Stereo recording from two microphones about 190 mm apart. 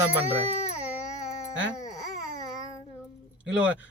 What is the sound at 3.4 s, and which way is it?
Speech, 5° right (ahead or behind).